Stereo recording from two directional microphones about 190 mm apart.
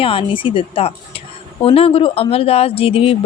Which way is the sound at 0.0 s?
30° left (ahead or behind).